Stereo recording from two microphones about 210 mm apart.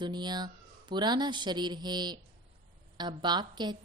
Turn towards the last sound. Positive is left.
turn(degrees=-20)  # may be behind; listen again after turning